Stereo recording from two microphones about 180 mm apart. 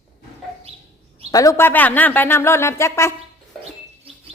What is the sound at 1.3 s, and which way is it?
Speech, 20° left (ahead or behind).